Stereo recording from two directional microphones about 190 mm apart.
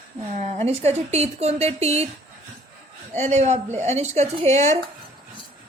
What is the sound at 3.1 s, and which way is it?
A woman's voice, 35° right (ahead or behind).